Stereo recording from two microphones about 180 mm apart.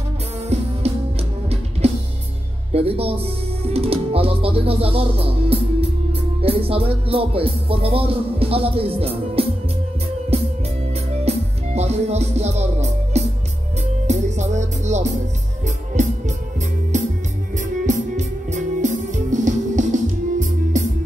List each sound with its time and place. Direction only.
0.5 s music: 35° right (ahead or behind)
1.8 s music: 35° right (ahead or behind)
2.7 s speech: 35° right (ahead or behind)
6.4 s music: 30° right (ahead or behind)